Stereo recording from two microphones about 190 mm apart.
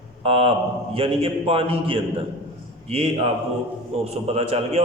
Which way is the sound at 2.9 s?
30° right (ahead or behind).